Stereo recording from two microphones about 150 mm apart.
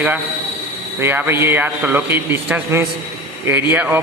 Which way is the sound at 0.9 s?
15° right (ahead or behind).